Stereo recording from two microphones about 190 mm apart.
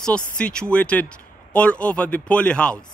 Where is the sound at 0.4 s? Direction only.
5° left (ahead or behind).